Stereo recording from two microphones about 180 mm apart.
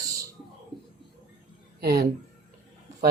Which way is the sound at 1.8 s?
65° right (ahead or behind).